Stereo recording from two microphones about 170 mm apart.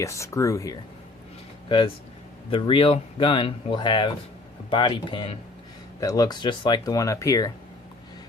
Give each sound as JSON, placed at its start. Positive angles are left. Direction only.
{"t": 0.0, "sound": "speech", "side_deg": 15}
{"t": 2.5, "sound": "speech", "side_deg": 30}